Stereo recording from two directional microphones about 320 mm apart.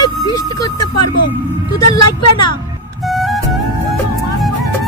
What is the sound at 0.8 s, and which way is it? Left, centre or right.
Speech, left.